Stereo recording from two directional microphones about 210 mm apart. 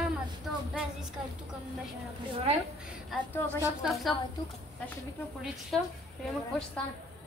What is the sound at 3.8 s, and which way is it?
Speech, centre (ahead or behind).